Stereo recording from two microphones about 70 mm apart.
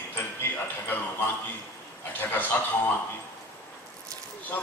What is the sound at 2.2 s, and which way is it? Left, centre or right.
Speech, left.